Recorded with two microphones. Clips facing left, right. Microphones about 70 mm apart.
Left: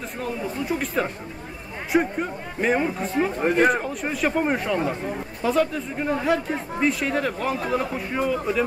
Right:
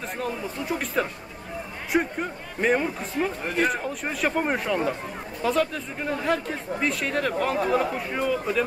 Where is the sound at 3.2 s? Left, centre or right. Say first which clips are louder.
Left 3 dB; left.